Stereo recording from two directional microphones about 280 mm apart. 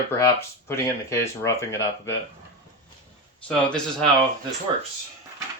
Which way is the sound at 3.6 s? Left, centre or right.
Centre.